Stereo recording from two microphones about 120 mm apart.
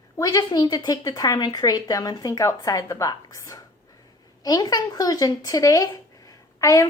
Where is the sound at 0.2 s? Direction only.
30° left (ahead or behind).